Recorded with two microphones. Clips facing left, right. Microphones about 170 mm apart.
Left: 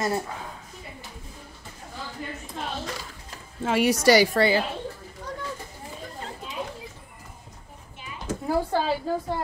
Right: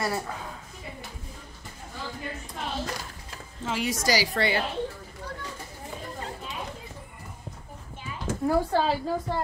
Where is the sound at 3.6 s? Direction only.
65° left (ahead or behind).